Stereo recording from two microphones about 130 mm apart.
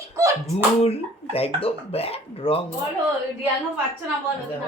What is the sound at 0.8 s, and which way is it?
Speech, 50° left (ahead or behind).